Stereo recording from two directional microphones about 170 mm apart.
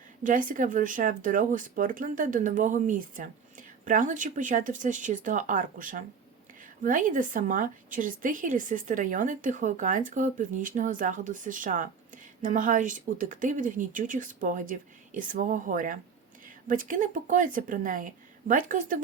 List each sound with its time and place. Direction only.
0.2 s a woman's voice: 50° right (ahead or behind)